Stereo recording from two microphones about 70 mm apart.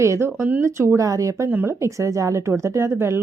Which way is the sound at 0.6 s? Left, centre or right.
Right.